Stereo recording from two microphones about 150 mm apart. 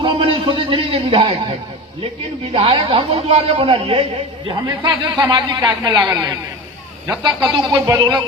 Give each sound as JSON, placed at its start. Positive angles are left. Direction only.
{"t": 0.0, "sound": "a sound", "side_deg": -35}
{"t": 2.5, "sound": "a man's voice", "side_deg": -40}
{"t": 4.6, "sound": "a woman's voice", "side_deg": -30}